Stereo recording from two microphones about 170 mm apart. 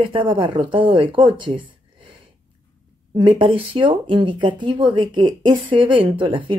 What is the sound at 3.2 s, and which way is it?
Speech, 30° right (ahead or behind).